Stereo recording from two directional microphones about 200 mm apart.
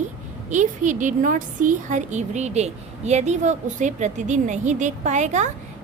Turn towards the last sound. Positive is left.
turn(degrees=-35)  # may be behind; listen again after turning